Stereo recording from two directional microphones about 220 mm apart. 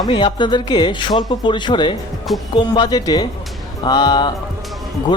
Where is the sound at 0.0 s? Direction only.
20° left (ahead or behind).